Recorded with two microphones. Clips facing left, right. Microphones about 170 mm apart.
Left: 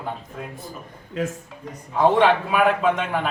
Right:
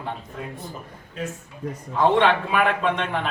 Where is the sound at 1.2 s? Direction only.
90° left.